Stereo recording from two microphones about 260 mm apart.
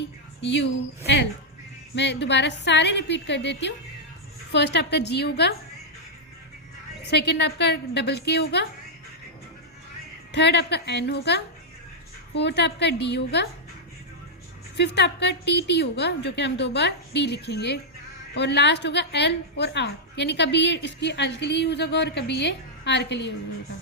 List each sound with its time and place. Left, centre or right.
0.4 s a woman's voice: left
7.1 s a woman's voice: left
10.3 s a woman's voice: left
14.8 s a woman's voice: left